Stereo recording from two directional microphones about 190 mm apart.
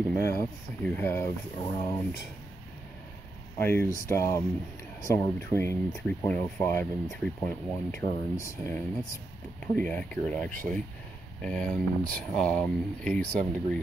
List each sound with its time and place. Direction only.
0.1 s speech: 15° left (ahead or behind)
3.5 s speech: 15° left (ahead or behind)
9.8 s speech: 10° left (ahead or behind)